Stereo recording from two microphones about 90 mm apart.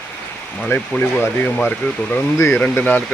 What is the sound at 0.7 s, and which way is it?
Speech, 25° left (ahead or behind).